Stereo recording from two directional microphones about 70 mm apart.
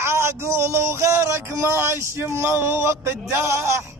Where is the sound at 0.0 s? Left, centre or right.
Right.